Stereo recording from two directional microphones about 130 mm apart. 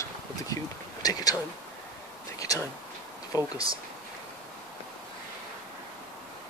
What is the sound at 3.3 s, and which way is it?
Speech, 30° left (ahead or behind).